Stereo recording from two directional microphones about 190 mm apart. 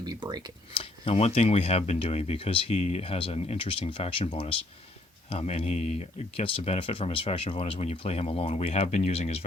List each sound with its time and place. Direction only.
0.0 s speech: 20° right (ahead or behind)
0.8 s speech: 30° left (ahead or behind)